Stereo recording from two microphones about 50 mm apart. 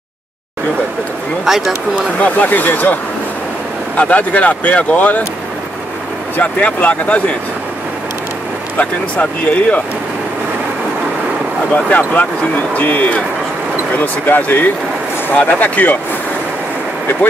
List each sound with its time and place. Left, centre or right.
1.4 s speech: centre
2.1 s speech: left
6.3 s speech: left
8.7 s speech: left
12.1 s speech: left